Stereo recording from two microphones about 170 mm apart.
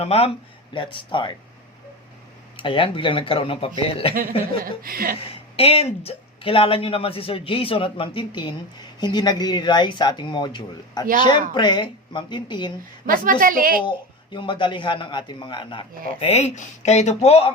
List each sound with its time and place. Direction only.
0.0 s speech: 35° left (ahead or behind)
2.6 s speech: 30° left (ahead or behind)
4.1 s a woman's voice: 55° right (ahead or behind)
5.2 s speech: 35° left (ahead or behind)
13.1 s a woman's voice: 55° right (ahead or behind)
14.3 s speech: 30° left (ahead or behind)
16.2 s speech: 40° left (ahead or behind)